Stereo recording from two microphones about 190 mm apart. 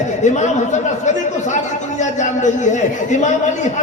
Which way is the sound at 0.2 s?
40° left (ahead or behind).